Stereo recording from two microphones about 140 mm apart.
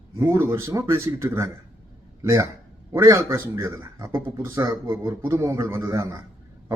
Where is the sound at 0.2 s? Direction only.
20° right (ahead or behind).